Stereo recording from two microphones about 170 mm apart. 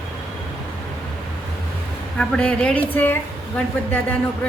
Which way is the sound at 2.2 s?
5° left (ahead or behind).